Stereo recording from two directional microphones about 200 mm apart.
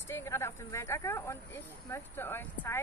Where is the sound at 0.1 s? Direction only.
15° left (ahead or behind).